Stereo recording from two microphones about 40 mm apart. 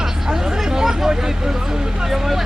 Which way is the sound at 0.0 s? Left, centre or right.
Centre.